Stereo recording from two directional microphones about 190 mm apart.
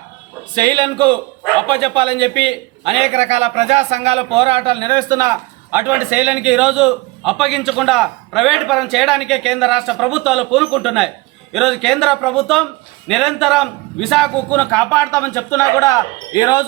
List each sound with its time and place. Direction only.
0.5 s a man's voice: 20° right (ahead or behind); by 16.6 s 20° left (ahead or behind)